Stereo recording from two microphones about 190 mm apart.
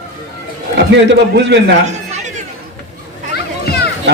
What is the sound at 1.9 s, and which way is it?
Chatter, 40° right (ahead or behind).